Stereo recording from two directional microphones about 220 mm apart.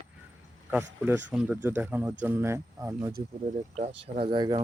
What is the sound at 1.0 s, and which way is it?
Speech, 10° right (ahead or behind).